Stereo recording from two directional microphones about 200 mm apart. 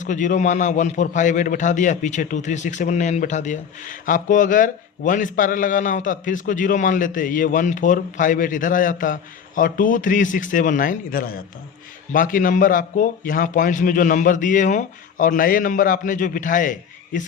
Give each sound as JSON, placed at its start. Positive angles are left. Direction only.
{"t": 0.0, "sound": "a man's voice", "side_deg": 40}